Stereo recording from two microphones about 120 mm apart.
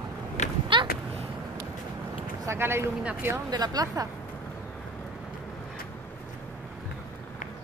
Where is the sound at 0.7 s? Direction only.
45° right (ahead or behind).